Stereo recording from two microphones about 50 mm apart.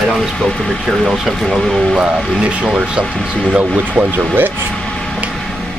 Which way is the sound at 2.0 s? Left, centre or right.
Right.